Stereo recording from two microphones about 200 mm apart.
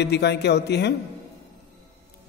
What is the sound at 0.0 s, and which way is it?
Speech, 55° left (ahead or behind).